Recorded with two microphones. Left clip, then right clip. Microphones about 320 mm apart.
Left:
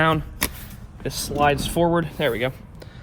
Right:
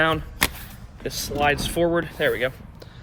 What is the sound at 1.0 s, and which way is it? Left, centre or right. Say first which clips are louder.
Speech: left 2 dB; centre.